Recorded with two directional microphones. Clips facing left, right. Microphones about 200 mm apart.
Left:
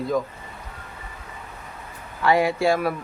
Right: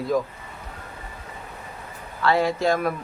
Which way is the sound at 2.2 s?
15° left (ahead or behind).